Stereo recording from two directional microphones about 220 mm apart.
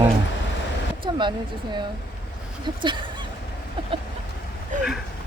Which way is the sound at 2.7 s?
20° right (ahead or behind).